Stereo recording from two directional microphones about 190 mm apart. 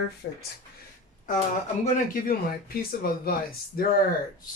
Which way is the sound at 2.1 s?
50° left (ahead or behind).